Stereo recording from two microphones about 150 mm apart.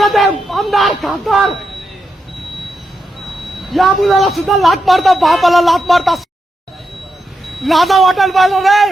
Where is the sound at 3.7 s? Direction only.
Centre (ahead or behind).